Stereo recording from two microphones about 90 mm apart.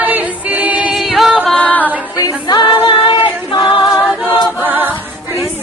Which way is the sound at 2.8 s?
60° left (ahead or behind).